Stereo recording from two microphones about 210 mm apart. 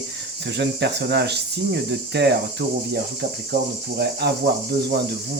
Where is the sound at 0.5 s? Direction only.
55° right (ahead or behind).